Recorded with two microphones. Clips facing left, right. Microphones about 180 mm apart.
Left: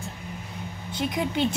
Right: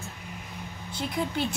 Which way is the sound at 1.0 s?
20° left (ahead or behind).